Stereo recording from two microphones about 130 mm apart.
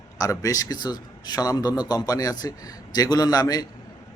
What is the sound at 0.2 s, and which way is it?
Speech, 25° left (ahead or behind).